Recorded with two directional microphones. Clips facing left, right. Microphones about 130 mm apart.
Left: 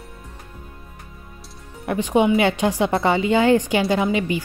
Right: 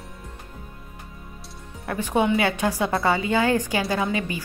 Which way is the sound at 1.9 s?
15° left (ahead or behind).